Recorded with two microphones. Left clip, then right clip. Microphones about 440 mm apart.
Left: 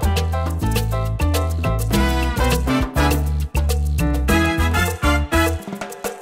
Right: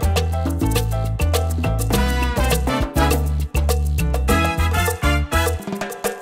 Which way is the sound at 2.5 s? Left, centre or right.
Right.